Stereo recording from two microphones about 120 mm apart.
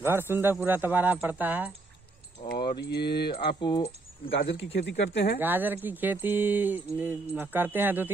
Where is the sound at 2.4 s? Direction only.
90° left.